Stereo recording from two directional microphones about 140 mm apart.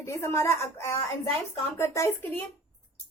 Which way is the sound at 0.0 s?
20° left (ahead or behind).